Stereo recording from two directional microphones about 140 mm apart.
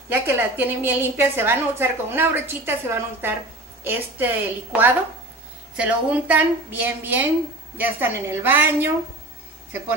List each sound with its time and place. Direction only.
0.1 s a woman's voice: 15° right (ahead or behind)